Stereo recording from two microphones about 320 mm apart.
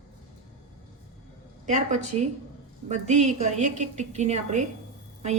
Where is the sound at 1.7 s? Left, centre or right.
Right.